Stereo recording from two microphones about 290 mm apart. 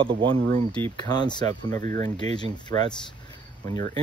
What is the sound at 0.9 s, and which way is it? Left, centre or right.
Speech, centre.